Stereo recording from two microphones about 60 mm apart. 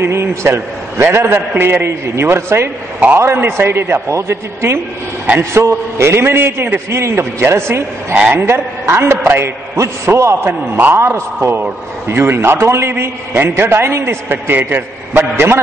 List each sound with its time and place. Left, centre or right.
0.0 s a man's voice: right